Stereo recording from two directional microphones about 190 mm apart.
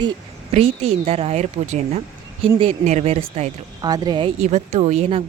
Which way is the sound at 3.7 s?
20° right (ahead or behind).